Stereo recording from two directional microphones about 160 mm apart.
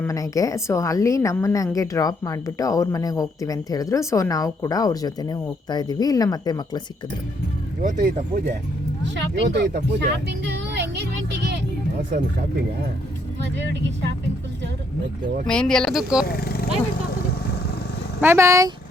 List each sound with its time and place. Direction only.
0.0 s a woman's voice: 20° left (ahead or behind)
7.8 s speech: 55° right (ahead or behind)
9.1 s speech: 90° right
15.4 s speech: 5° left (ahead or behind)
16.2 s speech: 75° left (ahead or behind)
17.1 s vehicle: 75° left (ahead or behind)
18.2 s speech: 15° right (ahead or behind)